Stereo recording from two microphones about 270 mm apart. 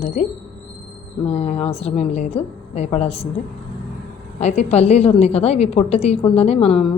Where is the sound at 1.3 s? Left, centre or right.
Left.